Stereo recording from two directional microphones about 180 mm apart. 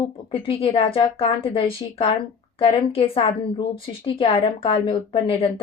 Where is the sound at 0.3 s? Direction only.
30° left (ahead or behind).